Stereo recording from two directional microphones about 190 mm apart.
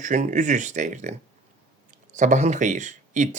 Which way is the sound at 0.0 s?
40° right (ahead or behind).